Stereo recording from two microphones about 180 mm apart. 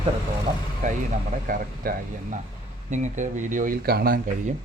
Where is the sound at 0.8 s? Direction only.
45° right (ahead or behind); by 4.2 s 60° right (ahead or behind).